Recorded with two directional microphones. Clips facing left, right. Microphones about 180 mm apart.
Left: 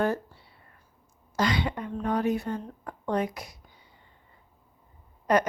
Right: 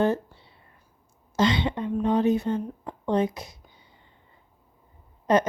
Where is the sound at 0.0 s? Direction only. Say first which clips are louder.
Right 3 dB; 25° right (ahead or behind).